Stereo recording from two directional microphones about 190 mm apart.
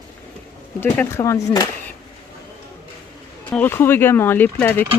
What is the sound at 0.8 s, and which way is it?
Speech, 10° left (ahead or behind).